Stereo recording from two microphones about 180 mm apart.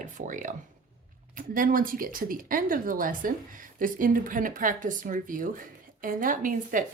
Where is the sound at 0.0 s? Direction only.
45° right (ahead or behind).